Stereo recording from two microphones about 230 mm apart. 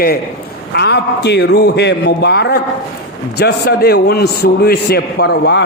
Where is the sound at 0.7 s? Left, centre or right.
Left.